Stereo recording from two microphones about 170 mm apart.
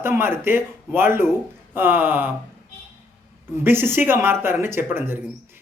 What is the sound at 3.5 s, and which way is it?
Speech, 15° right (ahead or behind).